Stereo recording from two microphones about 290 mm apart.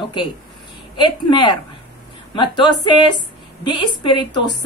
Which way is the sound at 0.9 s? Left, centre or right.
Centre.